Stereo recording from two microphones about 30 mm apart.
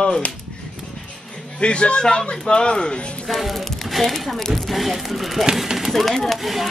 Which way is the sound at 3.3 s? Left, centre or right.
Centre.